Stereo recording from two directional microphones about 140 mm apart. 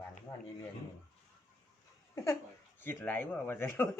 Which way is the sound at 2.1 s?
20° left (ahead or behind).